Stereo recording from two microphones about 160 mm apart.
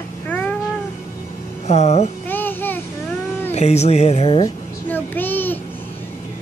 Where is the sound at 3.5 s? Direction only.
45° left (ahead or behind).